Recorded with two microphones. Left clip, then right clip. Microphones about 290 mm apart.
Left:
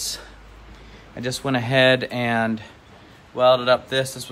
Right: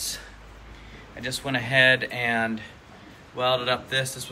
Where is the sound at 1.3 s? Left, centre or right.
Centre.